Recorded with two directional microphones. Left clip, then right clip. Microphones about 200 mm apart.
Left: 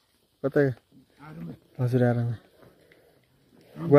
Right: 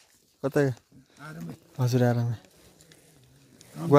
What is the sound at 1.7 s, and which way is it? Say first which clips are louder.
Speech: left 1 dB; 20° right (ahead or behind).